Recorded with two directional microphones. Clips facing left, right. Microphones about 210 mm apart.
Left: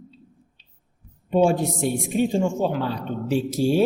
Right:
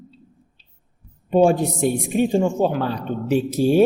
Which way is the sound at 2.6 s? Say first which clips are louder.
Right 3 dB; 50° right (ahead or behind).